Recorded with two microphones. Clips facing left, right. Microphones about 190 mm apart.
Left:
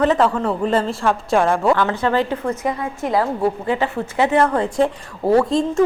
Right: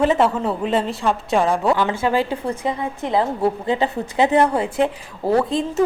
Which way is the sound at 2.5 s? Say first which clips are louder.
Left 1 dB; 20° right (ahead or behind).